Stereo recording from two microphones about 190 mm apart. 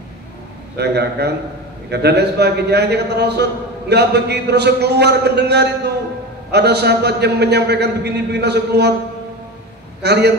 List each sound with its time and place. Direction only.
0.7 s a man's voice: 60° right (ahead or behind)
10.0 s a man's voice: 60° right (ahead or behind)